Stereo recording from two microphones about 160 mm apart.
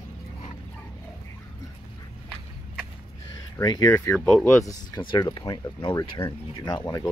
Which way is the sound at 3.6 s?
25° left (ahead or behind).